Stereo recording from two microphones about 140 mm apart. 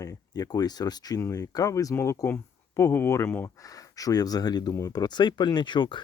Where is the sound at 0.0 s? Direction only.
25° left (ahead or behind).